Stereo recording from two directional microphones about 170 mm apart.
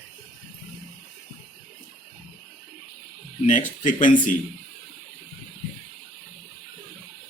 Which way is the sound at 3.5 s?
50° left (ahead or behind).